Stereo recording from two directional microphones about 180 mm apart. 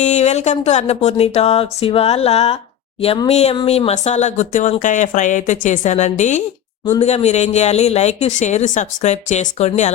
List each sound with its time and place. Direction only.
0.0 s speech: 40° left (ahead or behind)